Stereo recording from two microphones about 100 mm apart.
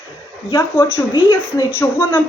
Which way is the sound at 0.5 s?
25° left (ahead or behind).